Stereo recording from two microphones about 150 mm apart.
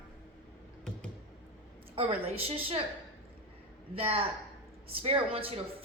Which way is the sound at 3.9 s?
40° right (ahead or behind).